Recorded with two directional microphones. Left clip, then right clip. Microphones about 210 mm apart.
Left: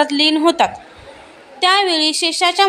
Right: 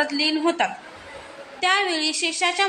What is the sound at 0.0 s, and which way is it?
A woman's voice, 30° left (ahead or behind).